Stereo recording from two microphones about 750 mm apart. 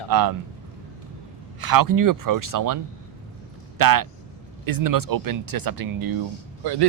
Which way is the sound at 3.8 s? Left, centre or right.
Right.